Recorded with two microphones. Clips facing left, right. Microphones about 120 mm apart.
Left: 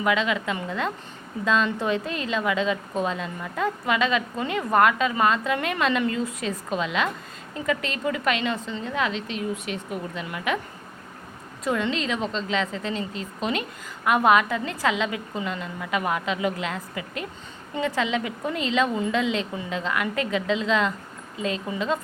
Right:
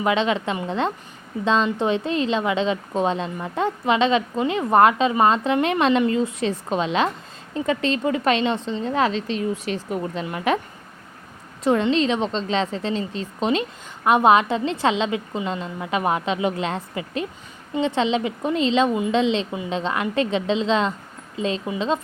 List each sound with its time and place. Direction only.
0.0 s a woman's voice: 30° right (ahead or behind)
11.6 s a woman's voice: 30° right (ahead or behind)